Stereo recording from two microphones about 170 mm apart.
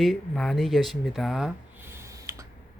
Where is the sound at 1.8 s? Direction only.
15° right (ahead or behind).